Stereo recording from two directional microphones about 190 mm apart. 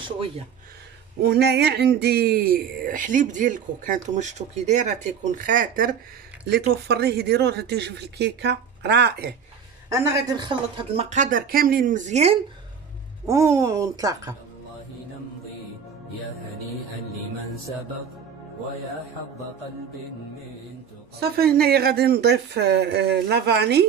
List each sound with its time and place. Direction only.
1.2 s speech: 60° right (ahead or behind)
6.9 s speech: 60° right (ahead or behind)
9.8 s speech: 15° right (ahead or behind)
11.0 s speech: 40° right (ahead or behind)
13.3 s speech: 15° right (ahead or behind)
21.2 s speech: 55° right (ahead or behind)